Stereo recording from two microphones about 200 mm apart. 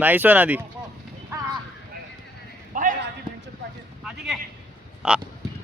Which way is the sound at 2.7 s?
40° right (ahead or behind).